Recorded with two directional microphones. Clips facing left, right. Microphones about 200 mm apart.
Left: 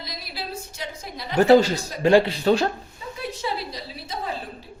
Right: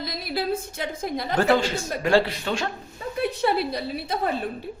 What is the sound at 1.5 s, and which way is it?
Speech, 40° left (ahead or behind).